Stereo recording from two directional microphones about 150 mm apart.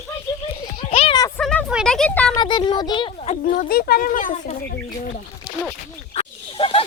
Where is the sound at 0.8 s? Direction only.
40° left (ahead or behind).